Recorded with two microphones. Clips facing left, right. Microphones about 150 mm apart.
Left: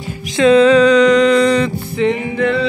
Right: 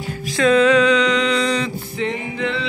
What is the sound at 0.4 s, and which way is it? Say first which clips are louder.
Music: left 5 dB; 30° left (ahead or behind).